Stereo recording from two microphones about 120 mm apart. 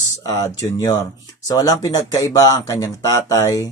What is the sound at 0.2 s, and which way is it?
Speech, 30° left (ahead or behind).